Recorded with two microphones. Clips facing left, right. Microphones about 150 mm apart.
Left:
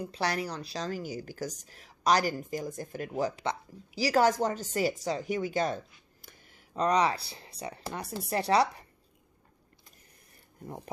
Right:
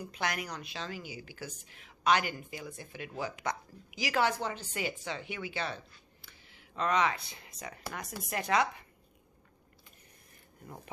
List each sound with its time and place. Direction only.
0.0 s a woman's voice: 35° left (ahead or behind)